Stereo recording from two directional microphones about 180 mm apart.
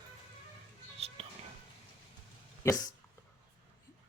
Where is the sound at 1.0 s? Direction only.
35° right (ahead or behind).